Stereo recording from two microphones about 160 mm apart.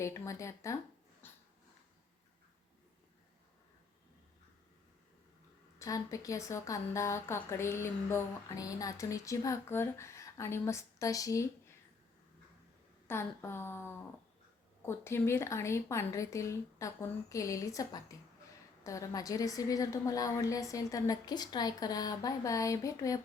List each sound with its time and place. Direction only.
0.0 s a woman's voice: 20° left (ahead or behind)
1.2 s a sound: 15° left (ahead or behind)
5.8 s a woman's voice: 20° left (ahead or behind)
13.1 s a woman's voice: 15° left (ahead or behind)